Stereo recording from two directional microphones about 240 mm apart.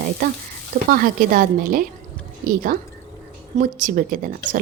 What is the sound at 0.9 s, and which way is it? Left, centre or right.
Speech, right.